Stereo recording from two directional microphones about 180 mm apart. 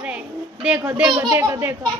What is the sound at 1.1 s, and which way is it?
Speech, 20° right (ahead or behind).